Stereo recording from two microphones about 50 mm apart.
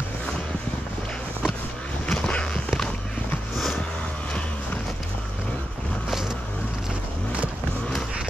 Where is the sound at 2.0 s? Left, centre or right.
Centre.